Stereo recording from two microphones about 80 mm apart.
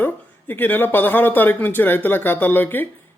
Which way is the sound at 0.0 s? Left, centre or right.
Left.